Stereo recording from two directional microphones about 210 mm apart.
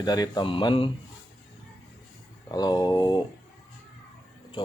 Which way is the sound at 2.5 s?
20° left (ahead or behind).